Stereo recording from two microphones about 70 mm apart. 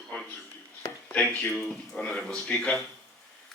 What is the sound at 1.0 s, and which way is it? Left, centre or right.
Speech, centre.